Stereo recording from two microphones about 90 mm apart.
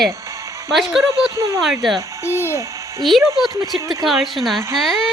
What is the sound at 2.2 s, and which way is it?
Speech, 30° left (ahead or behind).